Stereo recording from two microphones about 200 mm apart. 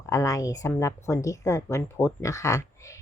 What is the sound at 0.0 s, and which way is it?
Speech, 15° left (ahead or behind).